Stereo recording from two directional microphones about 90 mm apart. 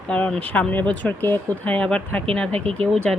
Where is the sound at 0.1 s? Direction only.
10° left (ahead or behind).